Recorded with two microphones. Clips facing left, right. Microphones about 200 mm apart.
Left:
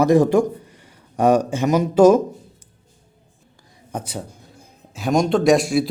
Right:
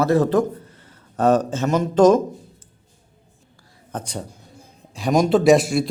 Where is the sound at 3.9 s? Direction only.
10° left (ahead or behind).